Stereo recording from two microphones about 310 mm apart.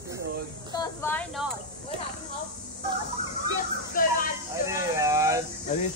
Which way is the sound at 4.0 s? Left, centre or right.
Left.